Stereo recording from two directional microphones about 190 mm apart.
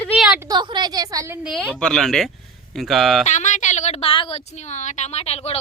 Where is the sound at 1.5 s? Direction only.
5° left (ahead or behind).